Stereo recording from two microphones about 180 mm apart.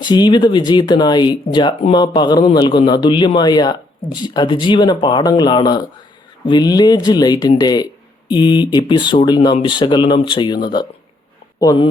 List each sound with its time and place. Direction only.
0.0 s a man's voice: 25° left (ahead or behind)